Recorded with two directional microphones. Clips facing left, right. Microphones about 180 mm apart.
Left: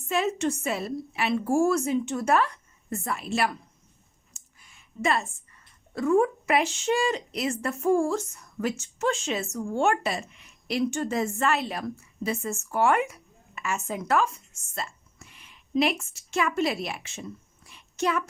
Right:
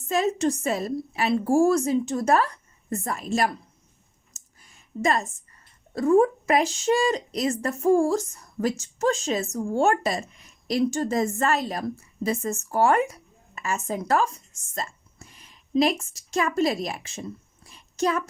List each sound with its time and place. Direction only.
0.0 s a woman's voice: 40° right (ahead or behind)
4.4 s a sound: 40° right (ahead or behind)
5.9 s a woman's voice: 35° right (ahead or behind)